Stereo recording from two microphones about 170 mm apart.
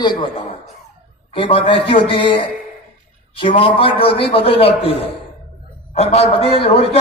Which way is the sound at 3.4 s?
30° left (ahead or behind).